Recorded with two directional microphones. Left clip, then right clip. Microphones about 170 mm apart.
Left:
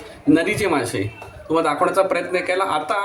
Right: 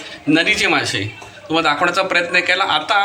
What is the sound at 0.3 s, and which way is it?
A man's voice, 25° left (ahead or behind).